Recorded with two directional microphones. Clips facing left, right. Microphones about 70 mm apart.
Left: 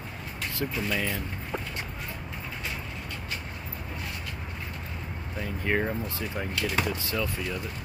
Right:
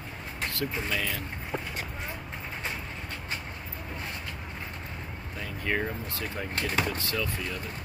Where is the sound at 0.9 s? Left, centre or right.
Centre.